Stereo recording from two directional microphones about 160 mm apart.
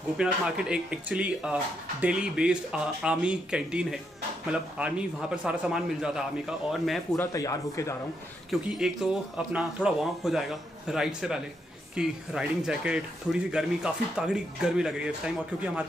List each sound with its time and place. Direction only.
0.2 s a man's voice: 5° right (ahead or behind)
7.2 s speech: 20° left (ahead or behind)
8.5 s a man's voice: 5° right (ahead or behind)